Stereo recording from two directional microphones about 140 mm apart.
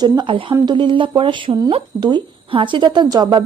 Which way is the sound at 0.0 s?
35° right (ahead or behind).